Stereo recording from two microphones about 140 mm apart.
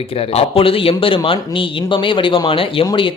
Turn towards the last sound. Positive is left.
turn(degrees=35)  # may be behind; listen again after turning